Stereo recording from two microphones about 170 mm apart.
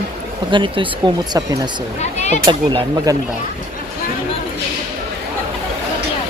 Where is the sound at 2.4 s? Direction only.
30° right (ahead or behind).